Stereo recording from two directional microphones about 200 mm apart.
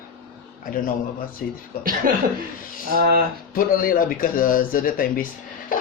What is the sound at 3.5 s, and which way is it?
Speech, 45° left (ahead or behind).